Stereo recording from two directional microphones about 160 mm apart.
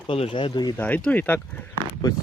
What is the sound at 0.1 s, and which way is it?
Speech, 30° left (ahead or behind).